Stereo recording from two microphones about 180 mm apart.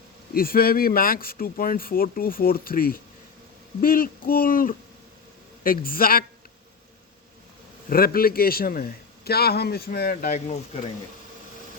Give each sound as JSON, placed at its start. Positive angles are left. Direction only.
{"t": 0.3, "sound": "a man's voice", "side_deg": 55}
{"t": 7.9, "sound": "a man's voice", "side_deg": 55}